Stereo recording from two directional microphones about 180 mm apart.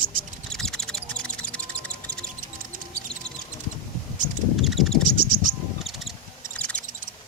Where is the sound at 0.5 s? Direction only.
5° left (ahead or behind).